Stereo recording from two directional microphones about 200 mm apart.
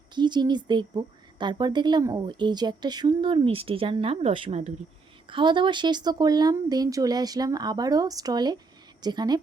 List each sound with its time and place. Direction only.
0.1 s a woman's voice: 20° right (ahead or behind)